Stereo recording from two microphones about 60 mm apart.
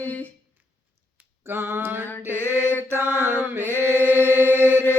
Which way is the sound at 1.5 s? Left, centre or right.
Right.